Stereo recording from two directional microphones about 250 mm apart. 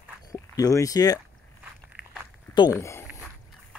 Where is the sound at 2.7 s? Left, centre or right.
Centre.